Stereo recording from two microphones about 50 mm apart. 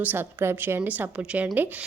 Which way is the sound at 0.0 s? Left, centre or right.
Right.